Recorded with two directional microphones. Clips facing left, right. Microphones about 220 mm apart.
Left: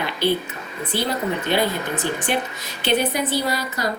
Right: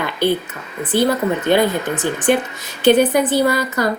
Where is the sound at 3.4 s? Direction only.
55° right (ahead or behind).